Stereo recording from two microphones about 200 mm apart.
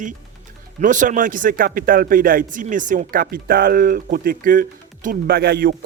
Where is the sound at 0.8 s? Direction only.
40° right (ahead or behind).